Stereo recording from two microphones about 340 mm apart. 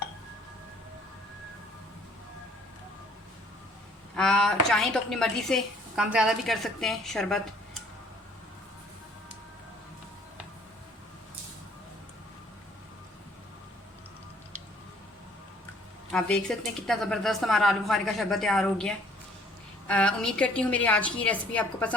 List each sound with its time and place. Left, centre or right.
4.1 s a woman's voice: centre
16.1 s a woman's voice: centre